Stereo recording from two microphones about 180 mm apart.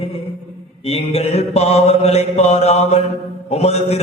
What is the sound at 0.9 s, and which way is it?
Mantra, 35° left (ahead or behind).